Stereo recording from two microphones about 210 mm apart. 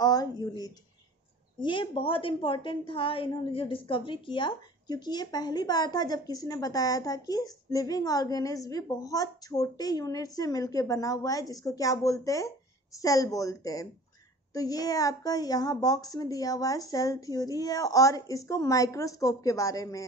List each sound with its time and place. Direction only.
0.0 s a woman's voice: 20° left (ahead or behind)